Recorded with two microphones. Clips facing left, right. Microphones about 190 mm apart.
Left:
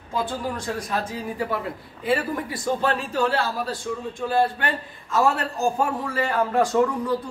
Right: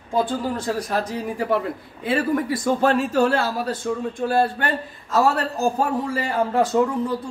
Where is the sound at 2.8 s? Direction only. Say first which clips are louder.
Right 6 dB; 45° right (ahead or behind).